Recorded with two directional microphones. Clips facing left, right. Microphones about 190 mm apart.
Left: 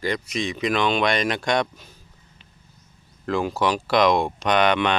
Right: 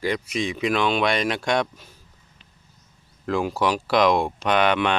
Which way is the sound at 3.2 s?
5° right (ahead or behind).